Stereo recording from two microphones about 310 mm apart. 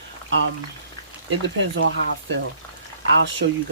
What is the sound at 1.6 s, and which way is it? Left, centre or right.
Frying, right.